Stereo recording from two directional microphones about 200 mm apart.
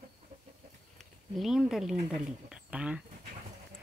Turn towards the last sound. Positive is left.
turn(degrees=-5)  # may be behind; listen again after turning